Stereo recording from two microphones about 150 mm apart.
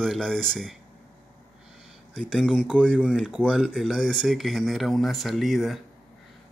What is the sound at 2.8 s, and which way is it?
Speech, 5° left (ahead or behind).